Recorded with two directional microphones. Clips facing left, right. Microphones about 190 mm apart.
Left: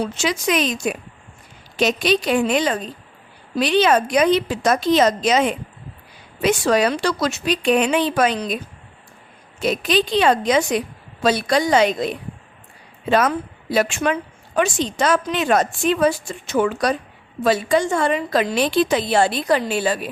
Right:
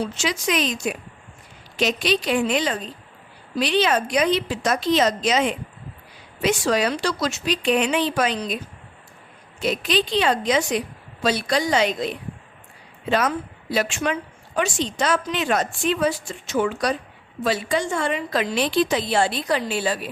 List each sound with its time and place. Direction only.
0.2 s a woman's voice: 50° left (ahead or behind)
9.6 s a woman's voice: 45° left (ahead or behind)